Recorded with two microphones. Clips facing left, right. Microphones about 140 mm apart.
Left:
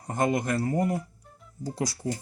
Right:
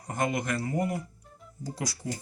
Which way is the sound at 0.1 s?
30° left (ahead or behind).